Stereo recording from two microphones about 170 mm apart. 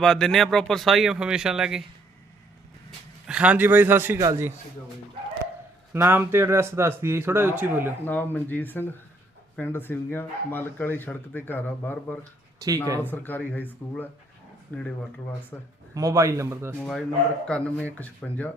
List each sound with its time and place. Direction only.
0.0 s speech: 5° left (ahead or behind)
3.2 s a man's voice: 5° right (ahead or behind)
5.9 s a man's voice: 15° right (ahead or behind)
8.0 s speech: 10° left (ahead or behind)
12.5 s speech: 20° right (ahead or behind)
13.0 s speech: 10° left (ahead or behind)
16.0 s a man's voice: 20° right (ahead or behind)
17.4 s speech: 5° left (ahead or behind)